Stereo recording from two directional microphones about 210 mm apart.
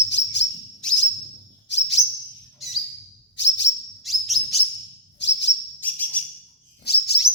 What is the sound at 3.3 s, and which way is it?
Chirp, 55° left (ahead or behind).